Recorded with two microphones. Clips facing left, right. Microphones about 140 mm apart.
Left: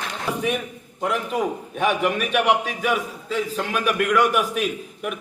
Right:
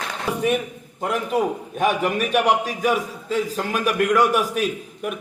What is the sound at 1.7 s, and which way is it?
A man's voice, 40° right (ahead or behind).